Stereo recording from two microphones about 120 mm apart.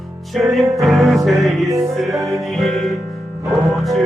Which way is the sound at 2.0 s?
25° right (ahead or behind).